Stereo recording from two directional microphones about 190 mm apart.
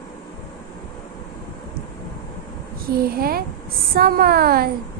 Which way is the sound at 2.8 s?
55° right (ahead or behind).